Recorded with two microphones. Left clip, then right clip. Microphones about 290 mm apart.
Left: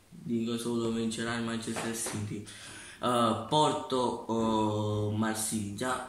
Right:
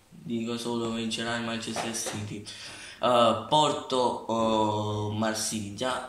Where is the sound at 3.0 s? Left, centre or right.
Centre.